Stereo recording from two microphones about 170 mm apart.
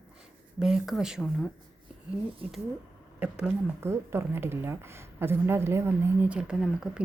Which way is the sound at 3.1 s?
5° right (ahead or behind).